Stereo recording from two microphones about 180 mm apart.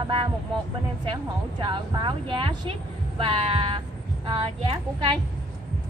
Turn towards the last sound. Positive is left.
turn(degrees=-30)  # may be behind; listen again after turning